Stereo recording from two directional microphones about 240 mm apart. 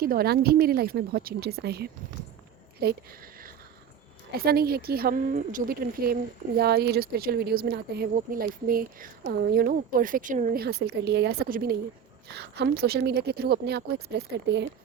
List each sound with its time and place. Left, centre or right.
0.0 s speech: right